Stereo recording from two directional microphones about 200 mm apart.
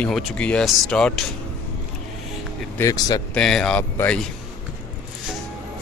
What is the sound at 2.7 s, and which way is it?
Speech, 15° left (ahead or behind).